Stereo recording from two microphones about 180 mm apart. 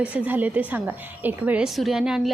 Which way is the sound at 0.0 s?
10° right (ahead or behind).